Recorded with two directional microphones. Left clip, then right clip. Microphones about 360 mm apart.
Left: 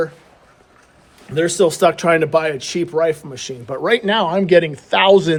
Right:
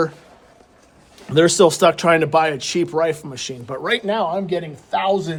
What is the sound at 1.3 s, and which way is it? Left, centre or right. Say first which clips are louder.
Speech: right 2 dB; centre.